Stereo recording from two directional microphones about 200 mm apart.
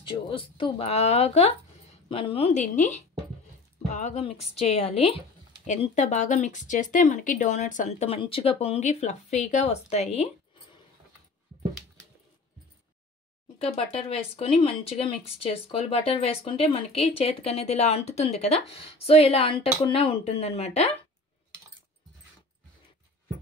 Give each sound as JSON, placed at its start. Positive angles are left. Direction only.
{"t": 0.0, "sound": "speech", "side_deg": 25}
{"t": 13.6, "sound": "speech", "side_deg": 30}